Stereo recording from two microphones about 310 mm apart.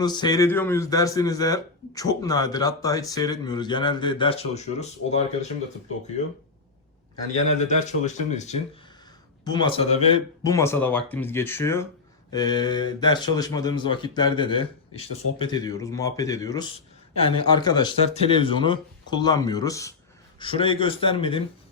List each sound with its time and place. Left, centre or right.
0.0 s speech: centre
7.7 s speech: left